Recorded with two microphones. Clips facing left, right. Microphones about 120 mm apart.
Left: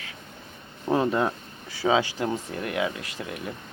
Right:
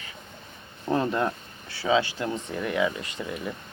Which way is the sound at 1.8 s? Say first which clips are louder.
Left 1 dB; 40° left (ahead or behind).